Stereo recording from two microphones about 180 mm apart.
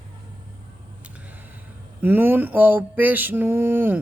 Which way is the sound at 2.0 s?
10° right (ahead or behind).